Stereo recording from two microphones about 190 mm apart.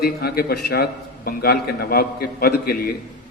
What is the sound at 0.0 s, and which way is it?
A man's voice, 55° left (ahead or behind).